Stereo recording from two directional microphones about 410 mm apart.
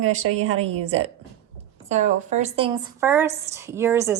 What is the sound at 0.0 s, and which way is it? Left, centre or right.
Speech, right.